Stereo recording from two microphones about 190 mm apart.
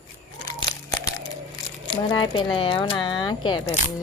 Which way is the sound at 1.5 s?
20° left (ahead or behind).